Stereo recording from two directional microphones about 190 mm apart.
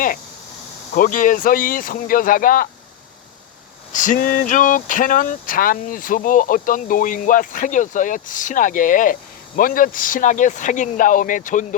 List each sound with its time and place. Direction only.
0.9 s speech: 45° left (ahead or behind)
3.9 s speech: 40° left (ahead or behind)